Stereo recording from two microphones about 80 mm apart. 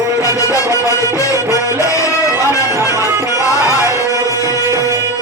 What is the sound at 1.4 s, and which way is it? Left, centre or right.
Music, right.